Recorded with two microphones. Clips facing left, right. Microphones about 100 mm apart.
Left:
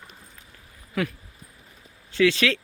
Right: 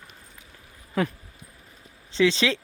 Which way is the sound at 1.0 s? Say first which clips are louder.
Right 2 dB; 30° right (ahead or behind).